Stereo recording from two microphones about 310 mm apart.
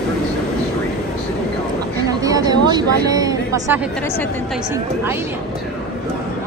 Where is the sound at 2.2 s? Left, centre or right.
Centre.